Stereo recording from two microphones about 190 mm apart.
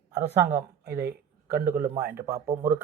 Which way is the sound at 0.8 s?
55° right (ahead or behind).